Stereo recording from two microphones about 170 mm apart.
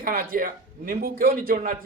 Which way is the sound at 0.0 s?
55° right (ahead or behind).